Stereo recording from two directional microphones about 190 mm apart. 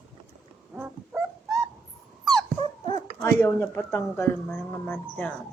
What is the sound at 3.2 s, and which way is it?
Speech, 10° left (ahead or behind).